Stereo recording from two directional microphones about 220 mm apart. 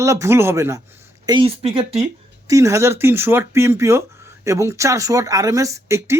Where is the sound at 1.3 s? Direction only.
25° right (ahead or behind).